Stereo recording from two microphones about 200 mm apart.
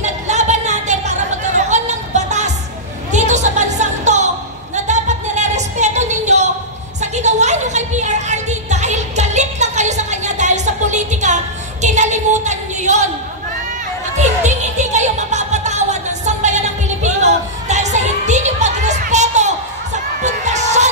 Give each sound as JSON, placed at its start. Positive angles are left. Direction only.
{"t": 0.0, "sound": "chatter", "side_deg": -35}
{"t": 3.1, "sound": "music", "side_deg": -35}
{"t": 4.7, "sound": "a sound", "side_deg": -35}
{"t": 7.0, "sound": "music", "side_deg": -35}
{"t": 14.1, "sound": "music", "side_deg": -35}